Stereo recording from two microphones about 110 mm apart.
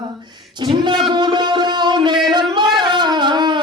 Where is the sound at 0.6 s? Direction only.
45° right (ahead or behind).